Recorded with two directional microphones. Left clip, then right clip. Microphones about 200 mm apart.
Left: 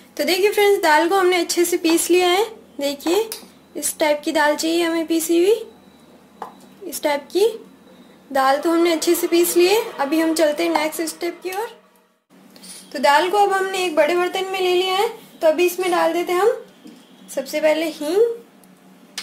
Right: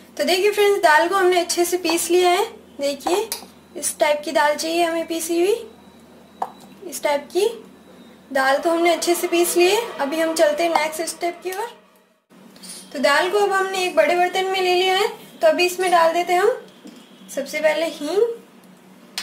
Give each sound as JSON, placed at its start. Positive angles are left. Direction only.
{"t": 0.2, "sound": "speech", "side_deg": 35}
{"t": 7.0, "sound": "speech", "side_deg": 30}
{"t": 13.0, "sound": "speech", "side_deg": 35}